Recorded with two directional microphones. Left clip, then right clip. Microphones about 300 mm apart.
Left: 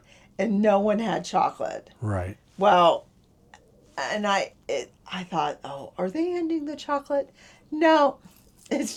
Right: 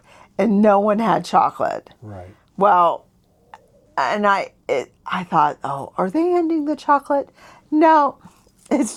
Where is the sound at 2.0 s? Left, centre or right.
Left.